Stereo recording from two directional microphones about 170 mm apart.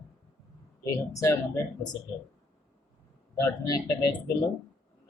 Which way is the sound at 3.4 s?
20° left (ahead or behind).